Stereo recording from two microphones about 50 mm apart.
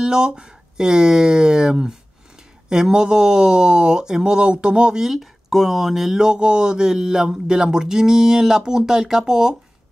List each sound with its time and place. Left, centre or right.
0.0 s speech: centre